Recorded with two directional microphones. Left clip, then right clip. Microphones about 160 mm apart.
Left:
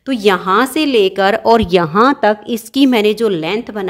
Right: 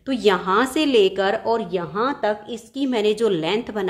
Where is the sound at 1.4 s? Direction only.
70° left (ahead or behind); by 2.8 s 90° left.